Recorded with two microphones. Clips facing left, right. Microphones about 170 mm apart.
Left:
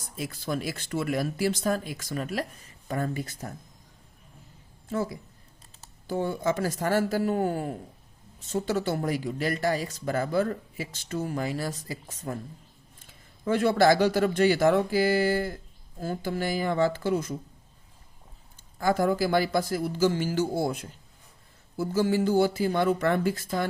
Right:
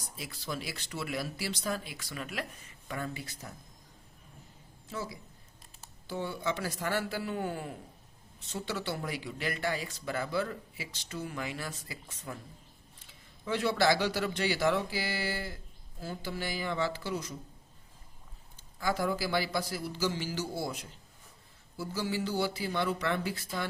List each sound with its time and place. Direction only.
0.2 s speech: 50° left (ahead or behind)
4.9 s speech: 50° left (ahead or behind)
18.8 s speech: 50° left (ahead or behind)